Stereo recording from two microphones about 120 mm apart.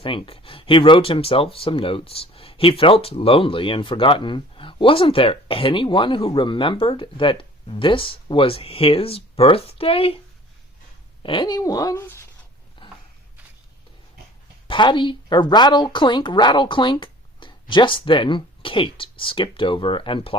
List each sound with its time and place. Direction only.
0.0 s speech: 50° left (ahead or behind)
11.2 s speech: 40° left (ahead or behind); by 12.2 s 20° left (ahead or behind)
12.8 s a sound: 40° left (ahead or behind)
14.7 s speech: 40° left (ahead or behind)